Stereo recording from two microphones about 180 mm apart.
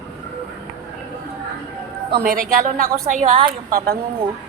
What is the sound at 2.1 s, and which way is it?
A woman's voice, 50° right (ahead or behind).